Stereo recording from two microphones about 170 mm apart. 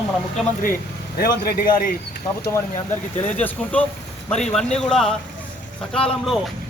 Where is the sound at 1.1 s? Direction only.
60° left (ahead or behind).